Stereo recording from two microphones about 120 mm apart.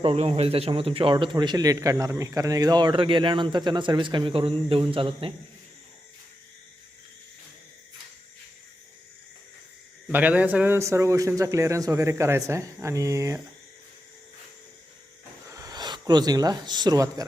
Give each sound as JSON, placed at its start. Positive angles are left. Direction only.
{"t": 0.0, "sound": "a man's voice", "side_deg": -55}
{"t": 10.1, "sound": "speech", "side_deg": -15}
{"t": 10.8, "sound": "speech", "side_deg": -25}
{"t": 15.4, "sound": "speech", "side_deg": -30}